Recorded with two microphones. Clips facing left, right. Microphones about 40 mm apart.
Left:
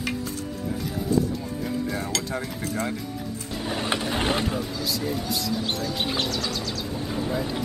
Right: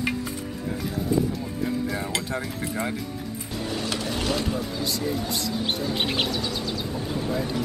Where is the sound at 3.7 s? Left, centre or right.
Left.